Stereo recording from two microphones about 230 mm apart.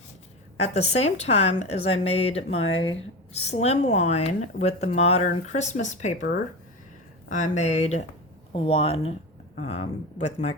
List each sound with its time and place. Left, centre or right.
0.5 s speech: left